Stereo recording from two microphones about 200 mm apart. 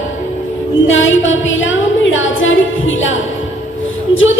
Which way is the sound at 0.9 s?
75° left (ahead or behind).